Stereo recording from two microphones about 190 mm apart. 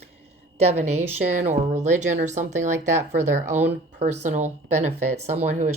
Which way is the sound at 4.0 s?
40° right (ahead or behind).